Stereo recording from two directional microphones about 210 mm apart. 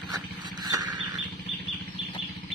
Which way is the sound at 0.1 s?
20° right (ahead or behind).